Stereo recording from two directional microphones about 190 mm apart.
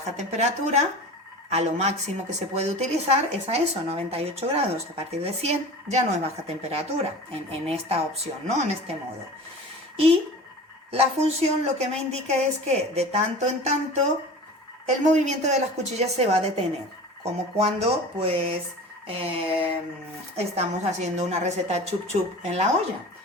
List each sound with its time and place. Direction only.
0.0 s speech: 35° right (ahead or behind)
10.9 s speech: 35° right (ahead or behind)
15.1 s speech: 40° right (ahead or behind)
19.0 s a sound: 30° right (ahead or behind)
20.3 s speech: 35° right (ahead or behind)